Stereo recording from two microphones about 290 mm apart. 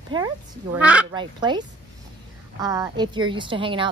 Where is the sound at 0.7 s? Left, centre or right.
Centre.